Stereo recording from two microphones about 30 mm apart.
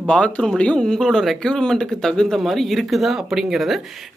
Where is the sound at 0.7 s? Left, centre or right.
Centre.